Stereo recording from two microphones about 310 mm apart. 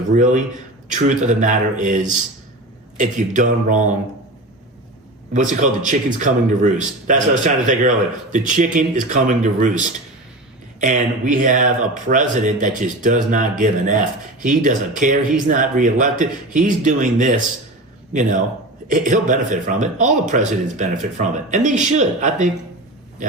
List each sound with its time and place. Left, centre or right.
0.1 s speech: right
5.3 s speech: right